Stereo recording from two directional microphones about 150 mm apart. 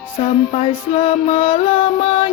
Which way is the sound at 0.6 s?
35° left (ahead or behind).